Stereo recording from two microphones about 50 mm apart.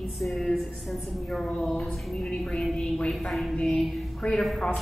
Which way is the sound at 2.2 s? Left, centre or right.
Centre.